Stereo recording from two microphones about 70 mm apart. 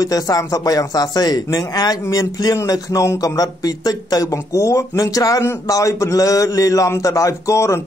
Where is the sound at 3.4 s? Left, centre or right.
Left.